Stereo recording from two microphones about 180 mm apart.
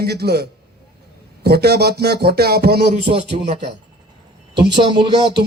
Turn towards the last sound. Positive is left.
turn(degrees=-30)  # may be behind; listen again after turning